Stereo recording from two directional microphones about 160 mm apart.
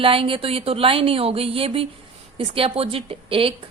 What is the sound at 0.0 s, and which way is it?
Speech, 35° right (ahead or behind).